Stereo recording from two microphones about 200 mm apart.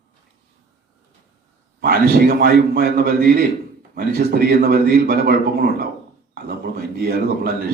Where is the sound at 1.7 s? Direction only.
50° right (ahead or behind).